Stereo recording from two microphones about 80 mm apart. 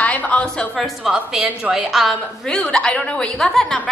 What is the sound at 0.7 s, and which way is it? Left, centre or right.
A woman's voice, centre.